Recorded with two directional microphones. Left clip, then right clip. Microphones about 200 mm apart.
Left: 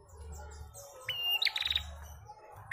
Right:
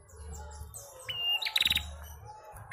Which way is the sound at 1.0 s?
40° left (ahead or behind).